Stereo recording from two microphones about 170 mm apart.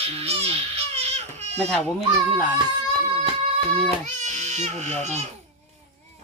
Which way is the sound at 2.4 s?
25° right (ahead or behind).